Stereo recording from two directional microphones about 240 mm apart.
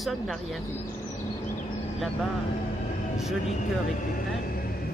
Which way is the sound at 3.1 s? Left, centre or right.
Centre.